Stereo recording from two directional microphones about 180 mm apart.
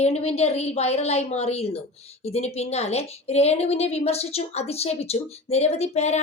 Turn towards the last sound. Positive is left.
turn(degrees=35)  # may be behind; listen again after turning